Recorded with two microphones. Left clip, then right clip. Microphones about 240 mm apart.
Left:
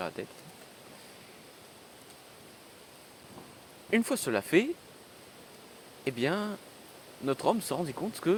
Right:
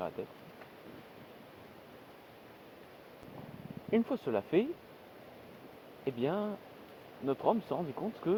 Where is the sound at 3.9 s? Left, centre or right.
Left.